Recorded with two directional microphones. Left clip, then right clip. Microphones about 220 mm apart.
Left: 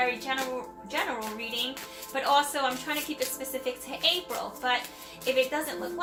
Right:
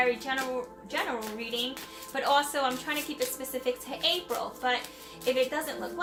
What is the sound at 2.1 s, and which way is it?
Speech, 25° right (ahead or behind).